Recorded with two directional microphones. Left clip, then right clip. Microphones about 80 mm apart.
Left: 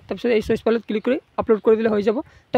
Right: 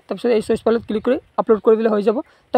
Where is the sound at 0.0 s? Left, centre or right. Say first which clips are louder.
Right 2 dB; centre.